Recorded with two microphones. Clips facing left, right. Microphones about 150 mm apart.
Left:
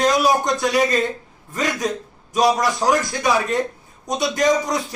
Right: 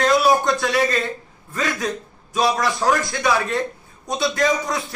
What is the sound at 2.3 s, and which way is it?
A man's voice, 15° left (ahead or behind).